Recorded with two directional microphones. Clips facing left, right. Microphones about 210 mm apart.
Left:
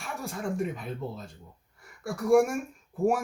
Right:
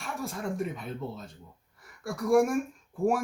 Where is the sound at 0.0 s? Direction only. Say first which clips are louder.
Even; centre (ahead or behind).